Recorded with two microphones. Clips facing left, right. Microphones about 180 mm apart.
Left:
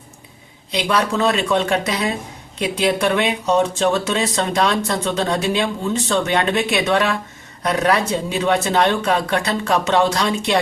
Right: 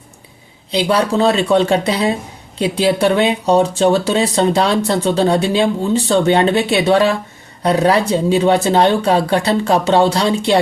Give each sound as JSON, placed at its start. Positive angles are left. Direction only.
{"t": 0.7, "sound": "speech", "side_deg": -30}